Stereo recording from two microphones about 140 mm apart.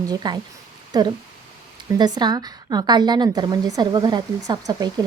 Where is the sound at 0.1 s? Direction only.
30° right (ahead or behind).